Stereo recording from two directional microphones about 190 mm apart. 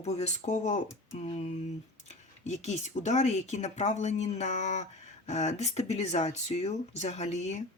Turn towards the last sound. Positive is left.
turn(degrees=35)  # may be behind; listen again after turning